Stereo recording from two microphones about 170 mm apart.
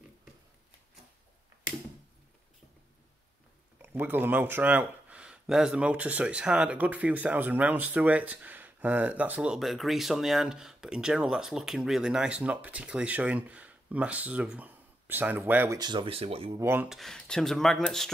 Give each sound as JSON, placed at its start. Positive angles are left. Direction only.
{"t": 3.8, "sound": "speech", "side_deg": -10}
{"t": 15.8, "sound": "speech", "side_deg": -30}
{"t": 16.5, "sound": "speech", "side_deg": -15}
{"t": 16.9, "sound": "speech", "side_deg": 0}